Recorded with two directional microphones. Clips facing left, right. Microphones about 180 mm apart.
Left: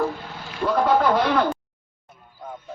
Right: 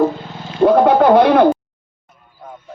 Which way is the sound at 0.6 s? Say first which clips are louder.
Right 9 dB; 55° right (ahead or behind).